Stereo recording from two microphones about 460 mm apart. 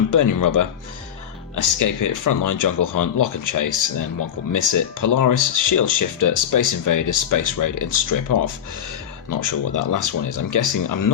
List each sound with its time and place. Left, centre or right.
0.1 s speech: left